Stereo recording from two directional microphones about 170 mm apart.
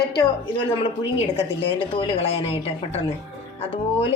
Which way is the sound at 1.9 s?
30° left (ahead or behind).